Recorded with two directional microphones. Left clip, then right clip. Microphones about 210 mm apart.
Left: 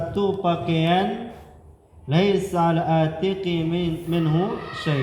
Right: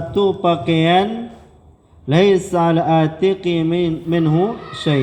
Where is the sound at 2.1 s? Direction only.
40° right (ahead or behind).